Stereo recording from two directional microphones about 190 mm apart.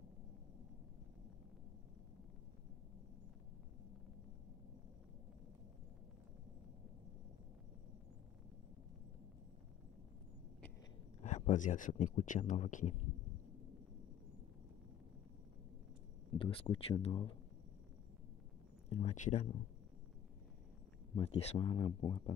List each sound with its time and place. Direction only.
11.2 s speech: 40° left (ahead or behind)
16.3 s speech: 30° left (ahead or behind)
18.9 s speech: 35° left (ahead or behind)
21.2 s speech: 30° left (ahead or behind)